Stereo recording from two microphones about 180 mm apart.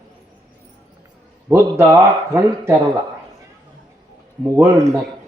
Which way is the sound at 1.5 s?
15° right (ahead or behind).